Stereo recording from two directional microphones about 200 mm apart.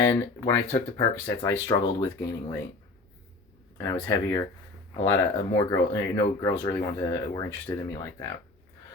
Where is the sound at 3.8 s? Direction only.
15° left (ahead or behind).